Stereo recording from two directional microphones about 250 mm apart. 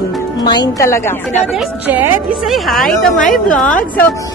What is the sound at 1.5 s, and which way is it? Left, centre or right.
Speech, centre.